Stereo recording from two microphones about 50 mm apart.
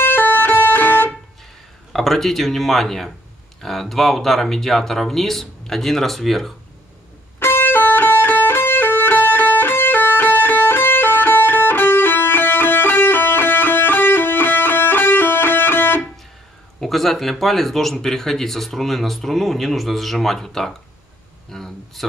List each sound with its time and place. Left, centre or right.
0.0 s music: left
1.9 s speech: centre
7.3 s music: left
16.8 s speech: centre